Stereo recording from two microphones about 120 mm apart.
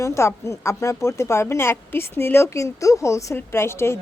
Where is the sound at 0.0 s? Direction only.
25° left (ahead or behind).